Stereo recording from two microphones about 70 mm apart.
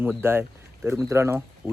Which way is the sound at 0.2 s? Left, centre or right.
Right.